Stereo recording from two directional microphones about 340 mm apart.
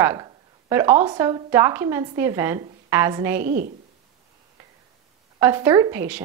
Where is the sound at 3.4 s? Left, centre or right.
Right.